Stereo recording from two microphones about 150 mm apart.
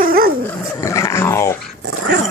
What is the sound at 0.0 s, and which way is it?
Dog, 85° right.